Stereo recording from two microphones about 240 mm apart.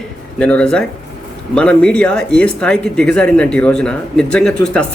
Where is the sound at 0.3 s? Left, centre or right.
Centre.